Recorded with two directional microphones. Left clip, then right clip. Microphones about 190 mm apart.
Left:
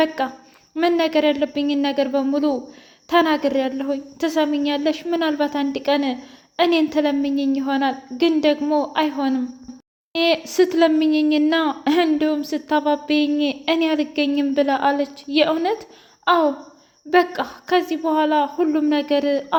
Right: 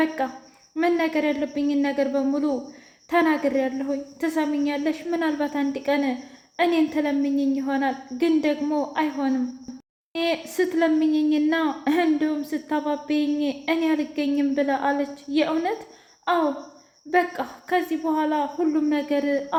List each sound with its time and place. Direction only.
0.2 s speech: 35° left (ahead or behind)